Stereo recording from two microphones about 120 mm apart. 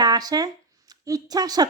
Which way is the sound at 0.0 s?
35° right (ahead or behind).